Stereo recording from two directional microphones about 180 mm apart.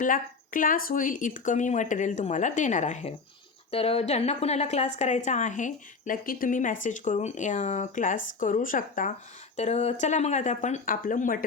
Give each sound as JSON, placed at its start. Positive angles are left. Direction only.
{"t": 0.0, "sound": "a woman's voice", "side_deg": 50}